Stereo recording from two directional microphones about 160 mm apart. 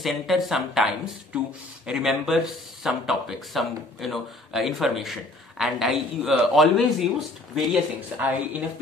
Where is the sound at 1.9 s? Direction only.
5° right (ahead or behind).